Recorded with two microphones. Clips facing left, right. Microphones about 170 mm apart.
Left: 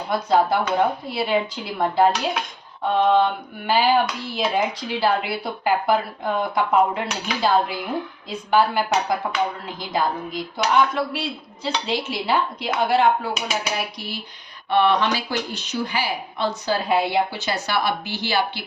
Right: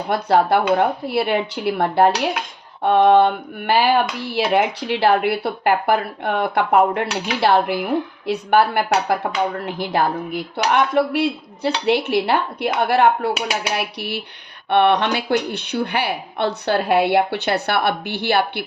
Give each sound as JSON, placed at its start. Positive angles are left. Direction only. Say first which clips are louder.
{"t": 0.1, "sound": "a woman's voice", "louder": "right 3 dB", "side_deg": -65}